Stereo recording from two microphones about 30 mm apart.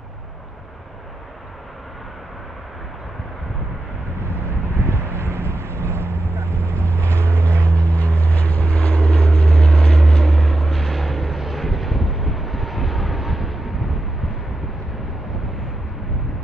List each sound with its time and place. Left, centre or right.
4.8 s vehicle: left
9.7 s vehicle: left
10.2 s vehicle: centre